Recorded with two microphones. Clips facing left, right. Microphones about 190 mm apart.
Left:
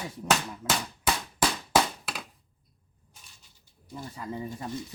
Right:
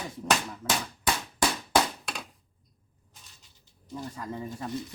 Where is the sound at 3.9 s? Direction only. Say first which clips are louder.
Even; 5° left (ahead or behind).